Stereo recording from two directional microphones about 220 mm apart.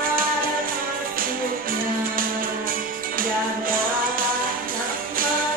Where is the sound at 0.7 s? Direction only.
40° right (ahead or behind).